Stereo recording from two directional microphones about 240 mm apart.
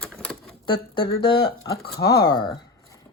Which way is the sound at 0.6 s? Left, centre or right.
Centre.